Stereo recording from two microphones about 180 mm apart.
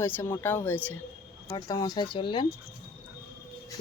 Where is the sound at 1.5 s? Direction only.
20° left (ahead or behind).